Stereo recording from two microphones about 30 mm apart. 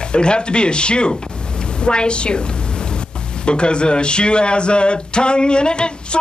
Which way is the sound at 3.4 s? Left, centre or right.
Left.